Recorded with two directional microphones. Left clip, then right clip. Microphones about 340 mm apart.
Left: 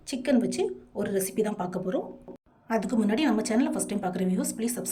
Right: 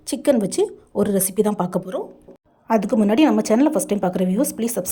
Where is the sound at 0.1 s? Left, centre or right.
Centre.